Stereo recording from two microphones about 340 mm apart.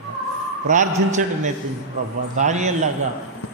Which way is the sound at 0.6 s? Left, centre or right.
Right.